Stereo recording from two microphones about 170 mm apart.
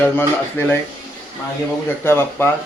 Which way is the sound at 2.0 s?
15° left (ahead or behind).